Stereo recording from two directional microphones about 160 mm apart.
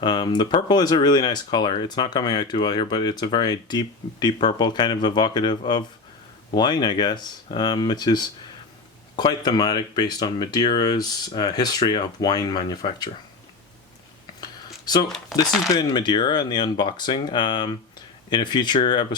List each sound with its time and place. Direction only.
0.0 s speech: 25° left (ahead or behind)
14.4 s a sound: 25° left (ahead or behind)
15.7 s speech: 25° left (ahead or behind)